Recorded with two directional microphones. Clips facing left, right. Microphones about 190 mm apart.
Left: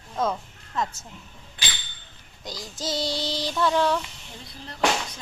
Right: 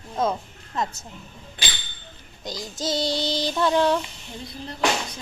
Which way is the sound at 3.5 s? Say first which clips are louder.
Right 2 dB; 25° right (ahead or behind).